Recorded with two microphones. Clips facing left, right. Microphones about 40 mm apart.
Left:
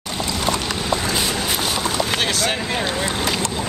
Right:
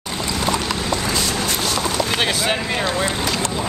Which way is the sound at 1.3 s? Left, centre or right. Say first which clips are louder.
Right 1 dB; centre.